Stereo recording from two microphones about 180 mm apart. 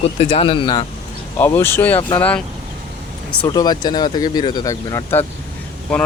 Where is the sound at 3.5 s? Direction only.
20° left (ahead or behind).